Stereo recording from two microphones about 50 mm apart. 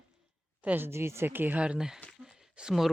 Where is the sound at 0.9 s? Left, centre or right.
Right.